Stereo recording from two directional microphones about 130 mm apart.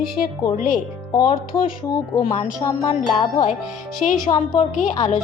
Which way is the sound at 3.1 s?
35° left (ahead or behind).